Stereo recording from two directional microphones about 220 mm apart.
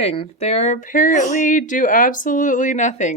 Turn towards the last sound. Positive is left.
turn(degrees=35)  # may be behind; listen again after turning